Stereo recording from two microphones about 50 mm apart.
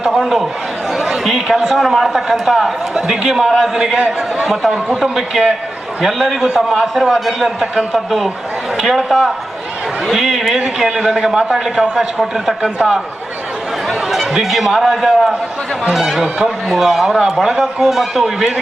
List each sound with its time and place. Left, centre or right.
0.0 s chatter: centre
1.5 s a man's voice: centre
3.9 s a man's voice: right
4.9 s a man's voice: centre
10.1 s a sound: centre
10.8 s a man's voice: centre
14.1 s a man's voice: centre